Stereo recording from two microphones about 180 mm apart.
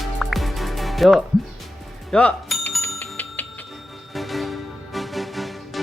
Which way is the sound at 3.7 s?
Centre (ahead or behind).